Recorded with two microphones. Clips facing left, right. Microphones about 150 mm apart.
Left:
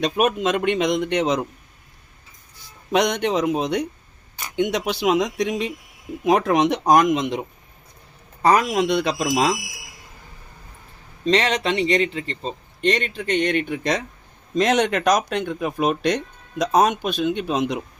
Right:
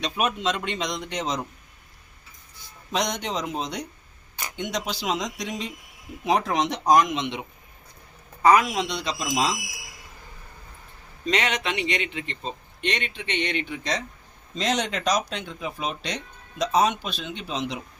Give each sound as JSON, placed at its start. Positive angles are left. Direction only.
{"t": 0.0, "sound": "speech", "side_deg": 50}
{"t": 2.9, "sound": "speech", "side_deg": 60}
{"t": 11.3, "sound": "speech", "side_deg": 35}